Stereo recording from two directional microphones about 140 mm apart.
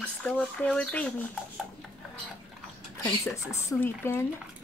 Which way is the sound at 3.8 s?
15° left (ahead or behind).